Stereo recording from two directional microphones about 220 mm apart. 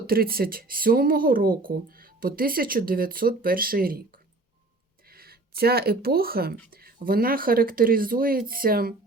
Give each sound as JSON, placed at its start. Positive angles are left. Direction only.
{"t": 0.1, "sound": "speech", "side_deg": -45}